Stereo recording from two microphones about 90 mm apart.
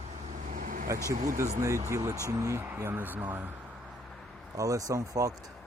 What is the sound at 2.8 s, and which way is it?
Speech, 20° right (ahead or behind).